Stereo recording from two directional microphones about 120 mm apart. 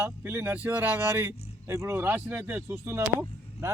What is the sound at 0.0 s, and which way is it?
Speech, 20° right (ahead or behind).